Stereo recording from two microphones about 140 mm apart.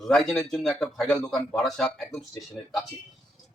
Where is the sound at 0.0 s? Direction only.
5° left (ahead or behind).